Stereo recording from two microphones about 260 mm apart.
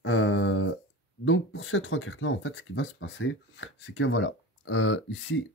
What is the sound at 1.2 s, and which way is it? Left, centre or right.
Speech, left.